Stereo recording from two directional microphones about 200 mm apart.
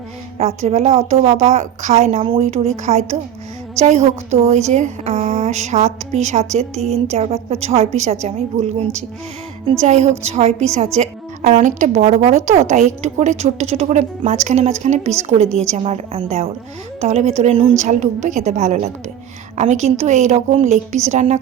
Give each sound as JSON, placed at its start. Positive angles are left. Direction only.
{"t": 0.3, "sound": "a woman's voice", "side_deg": -35}